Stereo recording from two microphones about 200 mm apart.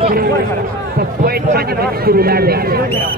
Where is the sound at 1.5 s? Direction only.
50° right (ahead or behind).